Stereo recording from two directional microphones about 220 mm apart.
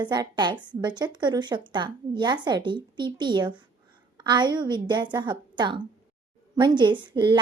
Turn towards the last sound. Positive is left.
turn(degrees=-20)  # may be behind; listen again after turning